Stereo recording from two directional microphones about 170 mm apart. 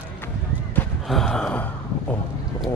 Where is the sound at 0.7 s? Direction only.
5° left (ahead or behind).